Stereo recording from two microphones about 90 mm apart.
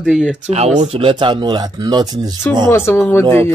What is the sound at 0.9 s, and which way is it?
Speech, 65° right (ahead or behind).